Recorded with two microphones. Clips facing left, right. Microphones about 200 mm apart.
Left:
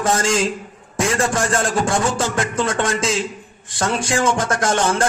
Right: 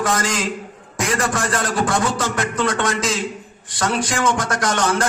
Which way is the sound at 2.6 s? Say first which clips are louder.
Right 2 dB; 25° left (ahead or behind).